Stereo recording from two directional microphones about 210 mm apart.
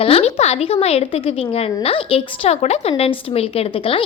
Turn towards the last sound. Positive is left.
turn(degrees=25)  # may be behind; listen again after turning